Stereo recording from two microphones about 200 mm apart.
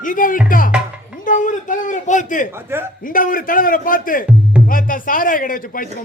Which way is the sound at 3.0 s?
45° left (ahead or behind).